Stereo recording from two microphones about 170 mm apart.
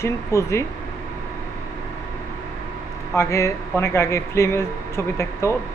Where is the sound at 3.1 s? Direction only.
15° left (ahead or behind).